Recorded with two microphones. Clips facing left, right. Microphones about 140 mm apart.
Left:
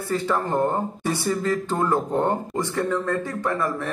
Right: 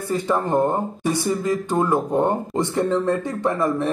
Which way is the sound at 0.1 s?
20° right (ahead or behind).